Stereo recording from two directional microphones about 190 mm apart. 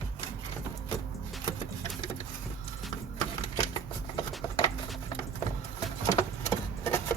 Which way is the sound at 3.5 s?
20° left (ahead or behind).